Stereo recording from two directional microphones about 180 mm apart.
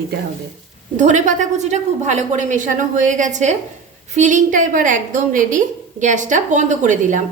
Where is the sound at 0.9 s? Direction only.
45° right (ahead or behind).